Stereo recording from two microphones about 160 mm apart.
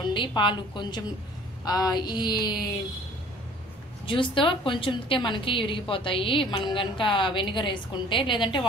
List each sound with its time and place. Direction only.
0.0 s a woman's voice: 30° left (ahead or behind)
4.0 s a woman's voice: 30° left (ahead or behind)